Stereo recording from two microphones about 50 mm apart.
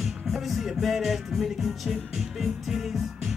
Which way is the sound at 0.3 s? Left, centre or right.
Centre.